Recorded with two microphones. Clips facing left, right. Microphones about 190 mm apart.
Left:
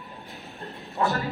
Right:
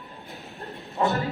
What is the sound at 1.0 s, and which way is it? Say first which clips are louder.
Speech: right 1 dB; 20° right (ahead or behind).